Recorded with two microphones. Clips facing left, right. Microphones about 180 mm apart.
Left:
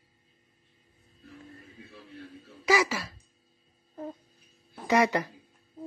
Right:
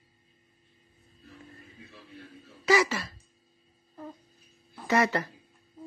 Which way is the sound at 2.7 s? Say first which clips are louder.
Right 1 dB; 10° left (ahead or behind).